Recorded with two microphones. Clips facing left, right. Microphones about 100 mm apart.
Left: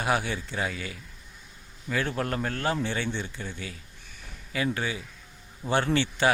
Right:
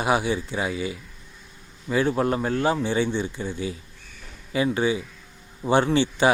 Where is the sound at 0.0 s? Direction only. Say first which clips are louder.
Right 5 dB; 15° right (ahead or behind).